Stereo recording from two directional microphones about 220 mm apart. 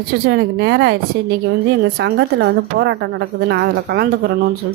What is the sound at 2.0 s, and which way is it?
A woman's voice, 50° right (ahead or behind).